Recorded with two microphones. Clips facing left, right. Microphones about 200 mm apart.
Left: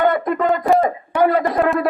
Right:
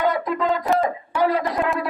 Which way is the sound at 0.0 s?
55° left (ahead or behind).